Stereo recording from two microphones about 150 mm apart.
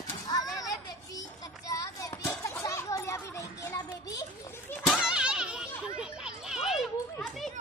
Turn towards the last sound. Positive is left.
turn(degrees=0)  # may be behind; listen again after turning